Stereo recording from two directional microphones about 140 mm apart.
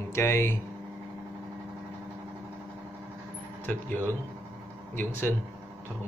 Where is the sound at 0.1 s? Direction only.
20° left (ahead or behind).